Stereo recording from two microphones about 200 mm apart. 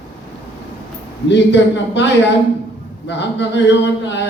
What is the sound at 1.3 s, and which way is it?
Speech, 60° left (ahead or behind).